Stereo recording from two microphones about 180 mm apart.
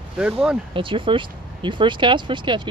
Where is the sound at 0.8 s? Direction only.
30° right (ahead or behind).